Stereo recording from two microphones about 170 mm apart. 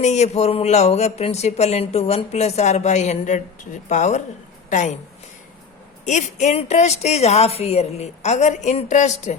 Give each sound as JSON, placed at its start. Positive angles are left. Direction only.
{"t": 0.0, "sound": "a woman's voice", "side_deg": 40}
{"t": 6.1, "sound": "speech", "side_deg": 45}